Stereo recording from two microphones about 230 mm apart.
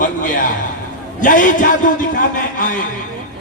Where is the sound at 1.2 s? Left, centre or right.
Left.